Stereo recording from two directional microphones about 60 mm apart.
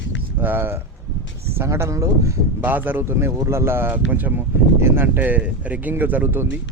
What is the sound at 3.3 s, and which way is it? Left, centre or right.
Speech, right.